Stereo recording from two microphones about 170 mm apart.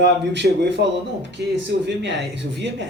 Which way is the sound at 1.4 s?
75° right (ahead or behind).